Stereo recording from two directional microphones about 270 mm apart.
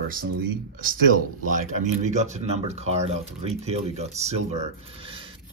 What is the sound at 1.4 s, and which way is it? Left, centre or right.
Speech, right.